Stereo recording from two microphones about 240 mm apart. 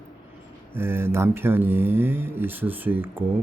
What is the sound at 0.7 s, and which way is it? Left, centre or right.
Speech, centre.